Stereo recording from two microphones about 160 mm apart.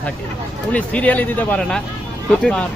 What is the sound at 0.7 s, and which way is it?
Speech, 10° left (ahead or behind).